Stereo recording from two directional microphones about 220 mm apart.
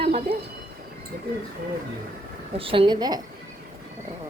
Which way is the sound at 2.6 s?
25° right (ahead or behind).